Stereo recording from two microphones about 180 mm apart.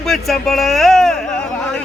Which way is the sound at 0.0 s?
Centre (ahead or behind).